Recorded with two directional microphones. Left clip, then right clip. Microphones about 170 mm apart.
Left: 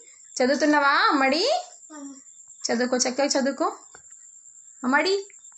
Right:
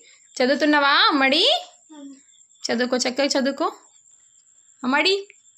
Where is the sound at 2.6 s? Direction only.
25° right (ahead or behind).